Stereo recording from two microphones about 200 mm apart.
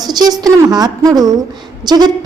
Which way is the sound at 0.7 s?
20° right (ahead or behind).